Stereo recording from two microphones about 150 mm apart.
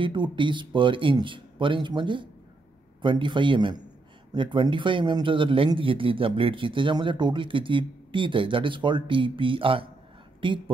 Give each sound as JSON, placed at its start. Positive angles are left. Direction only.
{"t": 0.0, "sound": "speech", "side_deg": -30}